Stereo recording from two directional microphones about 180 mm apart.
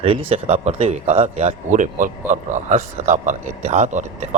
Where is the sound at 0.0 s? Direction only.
30° right (ahead or behind).